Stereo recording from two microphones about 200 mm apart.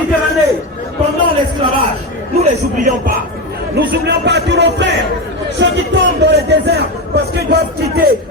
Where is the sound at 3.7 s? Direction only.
60° right (ahead or behind).